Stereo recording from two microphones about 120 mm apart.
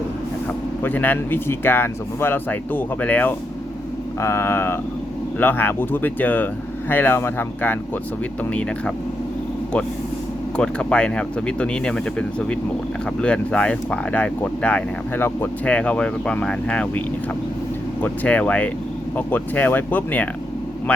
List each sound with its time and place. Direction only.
0.8 s speech: 15° left (ahead or behind)
10.6 s speech: 10° left (ahead or behind)
13.2 s speech: 10° left (ahead or behind)
18.0 s speech: 10° left (ahead or behind)